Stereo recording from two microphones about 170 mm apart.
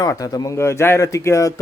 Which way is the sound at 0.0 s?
20° left (ahead or behind).